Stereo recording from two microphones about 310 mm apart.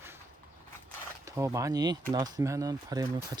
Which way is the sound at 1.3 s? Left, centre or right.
Centre.